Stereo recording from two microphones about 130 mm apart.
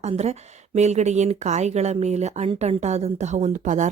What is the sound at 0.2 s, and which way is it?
Speech, 60° right (ahead or behind).